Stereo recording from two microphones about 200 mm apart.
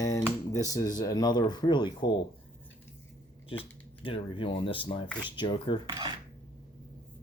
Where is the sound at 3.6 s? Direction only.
25° left (ahead or behind).